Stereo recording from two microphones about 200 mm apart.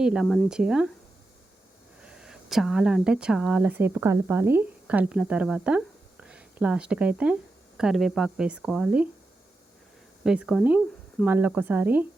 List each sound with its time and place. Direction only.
0.0 s speech: 5° right (ahead or behind)
2.0 s speech: 5° right (ahead or behind)
10.2 s speech: 5° right (ahead or behind)